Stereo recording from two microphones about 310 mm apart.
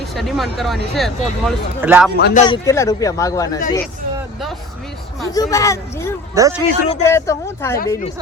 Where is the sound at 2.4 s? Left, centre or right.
Centre.